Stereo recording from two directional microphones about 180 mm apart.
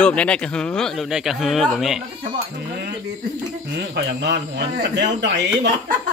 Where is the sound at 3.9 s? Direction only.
75° right (ahead or behind).